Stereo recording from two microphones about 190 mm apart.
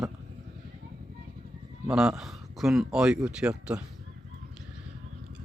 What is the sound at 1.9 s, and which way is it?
Speech, centre (ahead or behind).